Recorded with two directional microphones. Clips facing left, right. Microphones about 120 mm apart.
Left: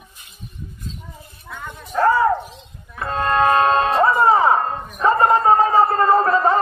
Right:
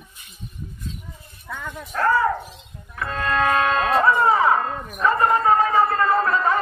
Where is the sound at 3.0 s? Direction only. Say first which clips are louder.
Left 4 dB; 35° left (ahead or behind).